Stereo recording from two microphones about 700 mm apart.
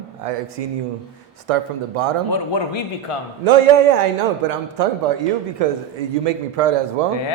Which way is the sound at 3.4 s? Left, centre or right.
Right.